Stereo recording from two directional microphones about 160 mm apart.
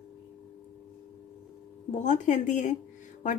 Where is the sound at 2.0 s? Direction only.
50° left (ahead or behind).